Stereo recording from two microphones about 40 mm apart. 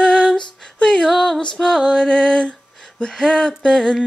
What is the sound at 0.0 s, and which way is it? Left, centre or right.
Female singing, left.